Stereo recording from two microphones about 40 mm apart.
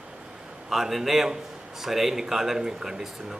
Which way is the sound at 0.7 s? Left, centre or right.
Centre.